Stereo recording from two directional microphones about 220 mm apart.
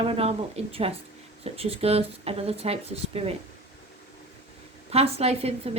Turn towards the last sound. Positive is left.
turn(degrees=-25)  # may be behind; listen again after turning